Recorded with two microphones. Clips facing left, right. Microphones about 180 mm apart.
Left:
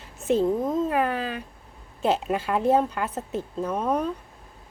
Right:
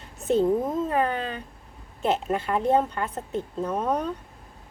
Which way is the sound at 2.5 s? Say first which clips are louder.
Left 1 dB; 5° left (ahead or behind).